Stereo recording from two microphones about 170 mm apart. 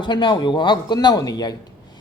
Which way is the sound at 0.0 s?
25° left (ahead or behind).